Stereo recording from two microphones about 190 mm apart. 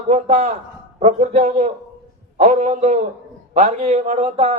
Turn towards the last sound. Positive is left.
turn(degrees=-35)  # may be behind; listen again after turning